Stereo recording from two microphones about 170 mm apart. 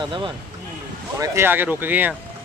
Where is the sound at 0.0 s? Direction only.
30° right (ahead or behind).